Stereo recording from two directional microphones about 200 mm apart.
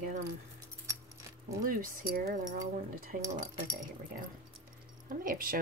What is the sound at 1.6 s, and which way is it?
Speech, 45° right (ahead or behind).